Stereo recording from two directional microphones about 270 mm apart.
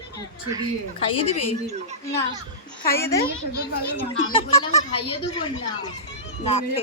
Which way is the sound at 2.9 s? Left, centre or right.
Centre.